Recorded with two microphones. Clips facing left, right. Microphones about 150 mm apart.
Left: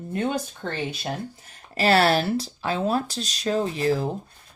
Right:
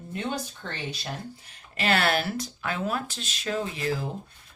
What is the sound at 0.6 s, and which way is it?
Speech, 35° left (ahead or behind).